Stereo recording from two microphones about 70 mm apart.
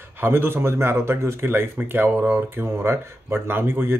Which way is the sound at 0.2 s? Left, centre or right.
Right.